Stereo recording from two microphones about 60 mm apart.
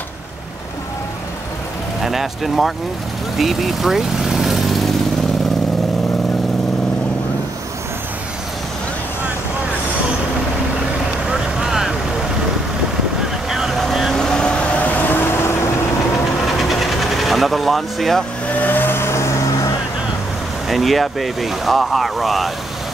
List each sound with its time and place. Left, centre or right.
2.0 s speech: centre
11.2 s vehicle: centre
13.5 s vehicle: centre; by 15.7 s left
16.4 s vehicle: centre
18.5 s vehicle: left
20.6 s speech: centre